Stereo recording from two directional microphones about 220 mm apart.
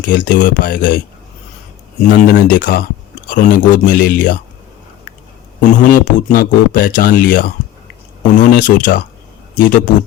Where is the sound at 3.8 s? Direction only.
40° left (ahead or behind).